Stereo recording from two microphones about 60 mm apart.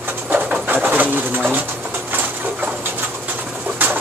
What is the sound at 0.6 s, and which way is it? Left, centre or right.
Bird, right.